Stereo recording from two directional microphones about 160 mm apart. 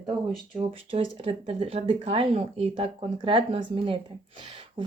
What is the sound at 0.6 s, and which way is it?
Speech, 35° right (ahead or behind).